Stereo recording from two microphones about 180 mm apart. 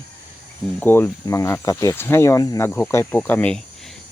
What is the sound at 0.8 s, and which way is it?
Speech, 10° left (ahead or behind).